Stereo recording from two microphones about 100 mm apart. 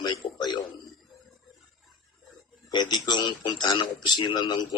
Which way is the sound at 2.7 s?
45° left (ahead or behind).